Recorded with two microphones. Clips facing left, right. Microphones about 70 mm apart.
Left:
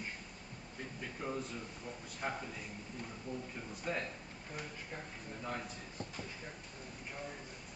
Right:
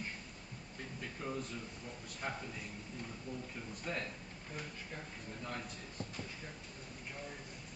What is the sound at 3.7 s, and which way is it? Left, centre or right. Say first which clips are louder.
Speech: left 2 dB; centre.